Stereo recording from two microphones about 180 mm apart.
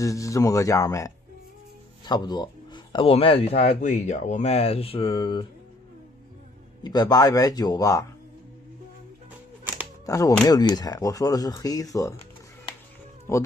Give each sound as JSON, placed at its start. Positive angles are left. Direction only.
{"t": 0.0, "sound": "speech", "side_deg": 15}
{"t": 6.8, "sound": "speech", "side_deg": 20}
{"t": 10.0, "sound": "speech", "side_deg": 20}
{"t": 13.3, "sound": "speech", "side_deg": 15}